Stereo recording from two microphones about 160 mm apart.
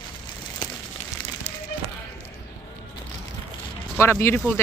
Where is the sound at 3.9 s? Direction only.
15° left (ahead or behind).